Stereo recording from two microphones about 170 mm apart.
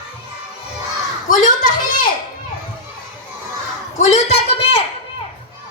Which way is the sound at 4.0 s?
40° left (ahead or behind).